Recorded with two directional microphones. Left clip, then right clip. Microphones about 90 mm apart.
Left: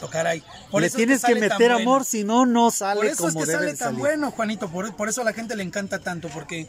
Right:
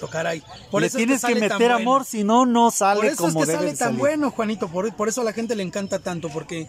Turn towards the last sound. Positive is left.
turn(degrees=-35)  # may be behind; listen again after turning